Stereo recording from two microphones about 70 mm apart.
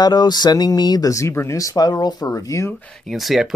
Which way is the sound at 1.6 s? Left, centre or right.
Left.